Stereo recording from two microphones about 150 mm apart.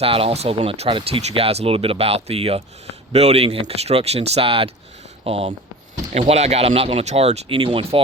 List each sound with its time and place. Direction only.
0.0 s speech: 40° right (ahead or behind)